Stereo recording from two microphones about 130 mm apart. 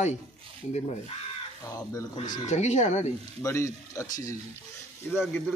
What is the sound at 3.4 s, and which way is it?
Speech, 25° left (ahead or behind).